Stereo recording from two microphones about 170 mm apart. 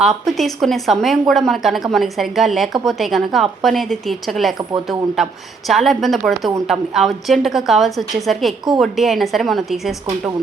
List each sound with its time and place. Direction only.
0.0 s a woman's voice: centre (ahead or behind)